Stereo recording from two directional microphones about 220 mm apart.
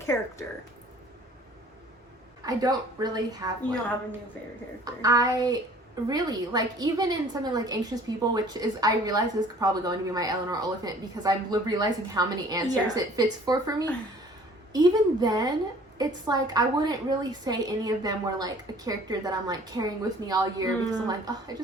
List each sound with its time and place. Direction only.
0.0 s speech: 15° left (ahead or behind)
2.4 s a woman's voice: 15° right (ahead or behind)
4.9 s a woman's voice: 15° right (ahead or behind)